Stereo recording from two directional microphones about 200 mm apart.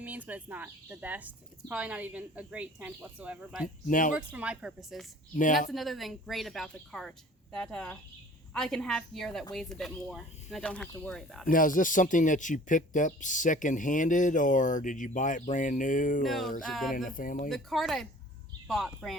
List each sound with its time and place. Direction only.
0.0 s a woman's voice: 10° right (ahead or behind)
3.8 s speech: 40° left (ahead or behind)
4.1 s speech: 5° right (ahead or behind)
11.4 s speech: 45° left (ahead or behind)
16.2 s speech: centre (ahead or behind)
17.1 s speech: 45° left (ahead or behind)
17.5 s speech: centre (ahead or behind)